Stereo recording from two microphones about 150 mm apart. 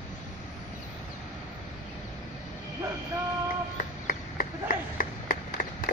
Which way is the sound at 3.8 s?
70° left (ahead or behind).